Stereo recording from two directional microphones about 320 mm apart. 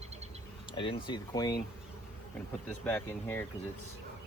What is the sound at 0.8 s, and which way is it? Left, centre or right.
Speech, centre.